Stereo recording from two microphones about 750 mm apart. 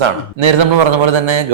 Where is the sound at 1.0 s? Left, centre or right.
Right.